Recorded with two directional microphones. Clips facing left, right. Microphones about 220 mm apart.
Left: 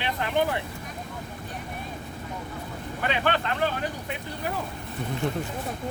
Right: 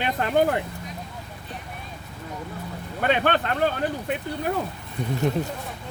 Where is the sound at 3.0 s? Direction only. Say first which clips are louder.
Right 4 dB; 45° right (ahead or behind).